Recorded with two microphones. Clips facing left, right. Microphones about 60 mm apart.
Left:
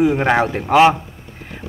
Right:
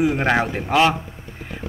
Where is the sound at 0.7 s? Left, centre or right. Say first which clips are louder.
Left 6 dB; centre.